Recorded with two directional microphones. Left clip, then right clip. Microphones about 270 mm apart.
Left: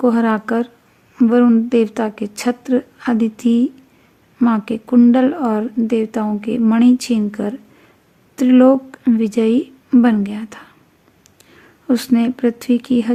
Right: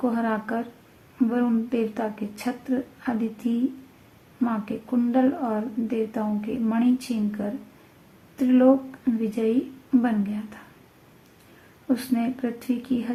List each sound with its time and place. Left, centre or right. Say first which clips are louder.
0.0 s speech: left 10 dB; left
11.9 s speech: left 9 dB; left